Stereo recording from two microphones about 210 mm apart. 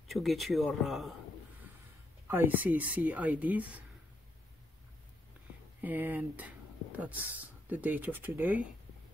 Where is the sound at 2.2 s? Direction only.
10° right (ahead or behind).